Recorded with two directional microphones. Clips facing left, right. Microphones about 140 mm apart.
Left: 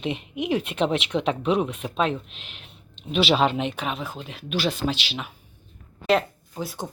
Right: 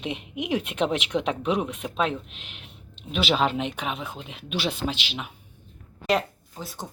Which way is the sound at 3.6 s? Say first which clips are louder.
Left 2 dB; 10° right (ahead or behind).